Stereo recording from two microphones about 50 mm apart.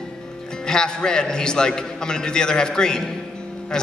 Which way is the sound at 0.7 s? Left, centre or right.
Centre.